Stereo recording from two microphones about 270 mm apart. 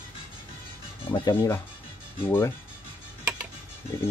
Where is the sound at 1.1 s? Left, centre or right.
Centre.